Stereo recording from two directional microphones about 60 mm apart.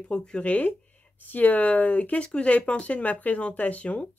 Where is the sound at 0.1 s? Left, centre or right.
Centre.